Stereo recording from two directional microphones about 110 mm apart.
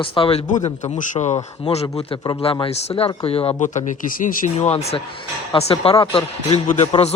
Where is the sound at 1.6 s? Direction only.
70° left (ahead or behind).